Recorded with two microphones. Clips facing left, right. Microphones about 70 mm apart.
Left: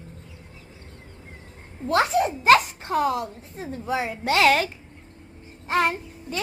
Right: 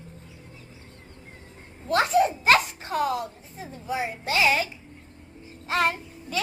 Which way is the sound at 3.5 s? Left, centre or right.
Left.